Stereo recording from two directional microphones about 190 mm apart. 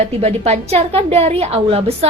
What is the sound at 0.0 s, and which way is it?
A woman's voice, 35° right (ahead or behind).